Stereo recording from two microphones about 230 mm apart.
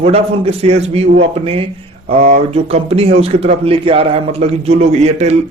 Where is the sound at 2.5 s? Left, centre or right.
Right.